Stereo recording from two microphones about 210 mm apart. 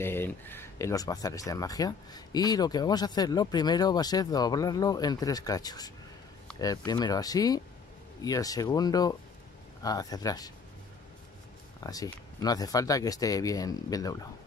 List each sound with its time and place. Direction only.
0.0 s speech: 10° left (ahead or behind)
11.8 s speech: 15° left (ahead or behind)